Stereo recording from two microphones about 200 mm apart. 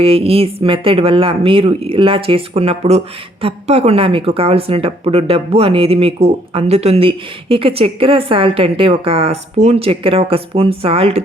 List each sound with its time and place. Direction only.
0.0 s speech: 30° right (ahead or behind)